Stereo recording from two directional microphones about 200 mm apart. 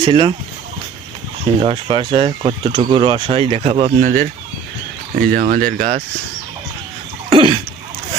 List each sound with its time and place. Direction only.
0.0 s speech: 25° right (ahead or behind)
1.6 s speech: 25° right (ahead or behind); by 6.0 s 40° right (ahead or behind)
7.3 s throat clearing: 25° right (ahead or behind)